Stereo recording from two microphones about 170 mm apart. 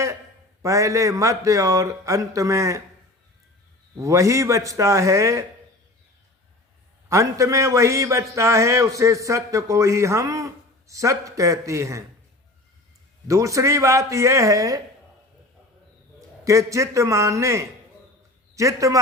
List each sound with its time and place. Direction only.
0.6 s a man's voice: 20° right (ahead or behind)
3.9 s a man's voice: 20° right (ahead or behind)
7.1 s a man's voice: 20° right (ahead or behind)
13.2 s a man's voice: 20° right (ahead or behind)
16.4 s a man's voice: 20° right (ahead or behind)